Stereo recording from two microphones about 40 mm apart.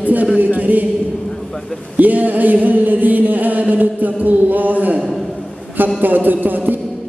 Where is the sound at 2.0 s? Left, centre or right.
Right.